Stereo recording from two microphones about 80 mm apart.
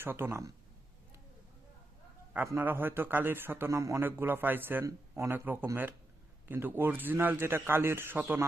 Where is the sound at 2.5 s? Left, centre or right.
Right.